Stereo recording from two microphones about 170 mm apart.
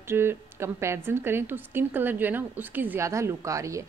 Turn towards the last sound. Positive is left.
turn(degrees=-20)  # may be behind; listen again after turning